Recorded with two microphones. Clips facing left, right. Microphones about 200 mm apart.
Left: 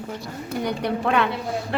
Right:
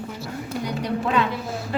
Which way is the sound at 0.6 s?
60° left (ahead or behind).